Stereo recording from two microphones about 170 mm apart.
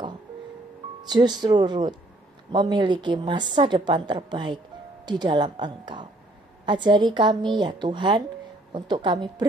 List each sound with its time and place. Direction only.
1.0 s a woman's voice: 25° right (ahead or behind)